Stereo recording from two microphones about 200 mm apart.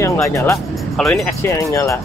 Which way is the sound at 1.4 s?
15° left (ahead or behind).